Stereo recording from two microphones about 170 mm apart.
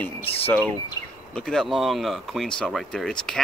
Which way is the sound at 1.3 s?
5° left (ahead or behind).